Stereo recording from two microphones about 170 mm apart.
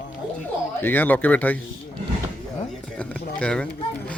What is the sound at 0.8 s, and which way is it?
Speech, 10° left (ahead or behind).